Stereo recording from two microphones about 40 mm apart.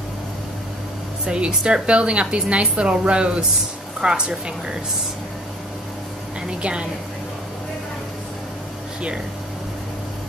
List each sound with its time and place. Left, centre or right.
1.2 s a woman's voice: right
6.6 s a woman's voice: right